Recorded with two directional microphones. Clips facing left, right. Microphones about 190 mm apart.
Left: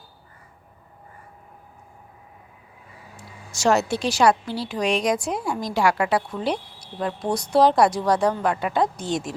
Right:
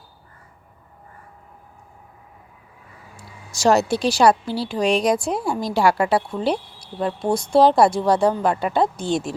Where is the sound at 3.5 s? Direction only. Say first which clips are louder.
Right 3 dB; 35° right (ahead or behind).